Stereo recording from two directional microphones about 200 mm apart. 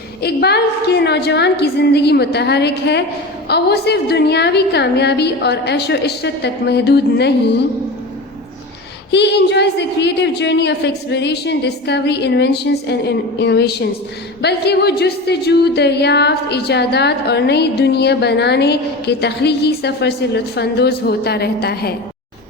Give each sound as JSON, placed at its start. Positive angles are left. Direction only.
{"t": 0.2, "sound": "a woman's voice", "side_deg": 55}
{"t": 9.1, "sound": "a woman's voice", "side_deg": 60}